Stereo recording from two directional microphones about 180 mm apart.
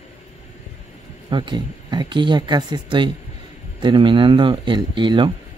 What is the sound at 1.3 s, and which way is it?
Speech, 25° right (ahead or behind).